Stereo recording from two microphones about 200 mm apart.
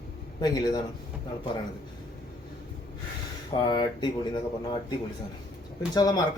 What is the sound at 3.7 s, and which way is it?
Speech, 20° left (ahead or behind).